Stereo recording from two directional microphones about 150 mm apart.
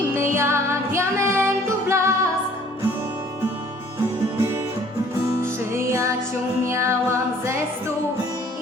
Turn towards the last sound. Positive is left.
turn(degrees=-20)  # may be behind; listen again after turning